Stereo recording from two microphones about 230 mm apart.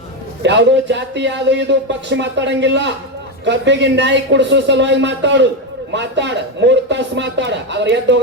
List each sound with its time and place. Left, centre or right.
0.4 s speech: right